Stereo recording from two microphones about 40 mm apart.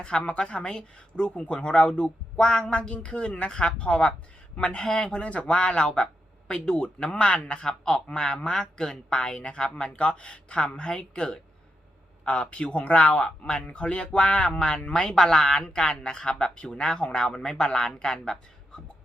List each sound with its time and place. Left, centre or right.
0.0 s a man's voice: left
4.8 s a man's voice: centre
5.0 s a man's voice: left
8.6 s a man's voice: centre
9.0 s a man's voice: left